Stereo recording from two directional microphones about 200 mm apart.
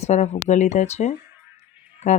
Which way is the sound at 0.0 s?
35° left (ahead or behind).